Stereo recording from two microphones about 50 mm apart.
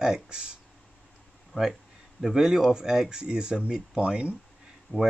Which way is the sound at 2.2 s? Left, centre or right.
Centre.